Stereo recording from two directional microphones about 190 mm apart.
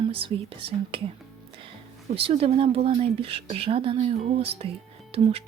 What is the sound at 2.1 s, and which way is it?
Speech, 30° right (ahead or behind).